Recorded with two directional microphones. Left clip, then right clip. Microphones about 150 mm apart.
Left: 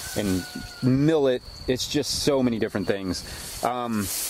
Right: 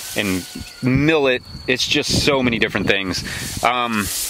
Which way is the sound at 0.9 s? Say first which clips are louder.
Right 5 dB; 20° right (ahead or behind).